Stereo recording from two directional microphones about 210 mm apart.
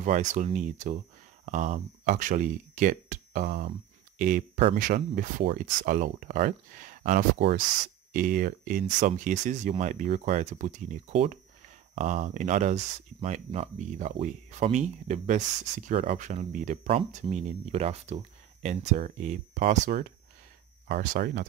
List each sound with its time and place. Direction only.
0.0 s speech: 35° right (ahead or behind)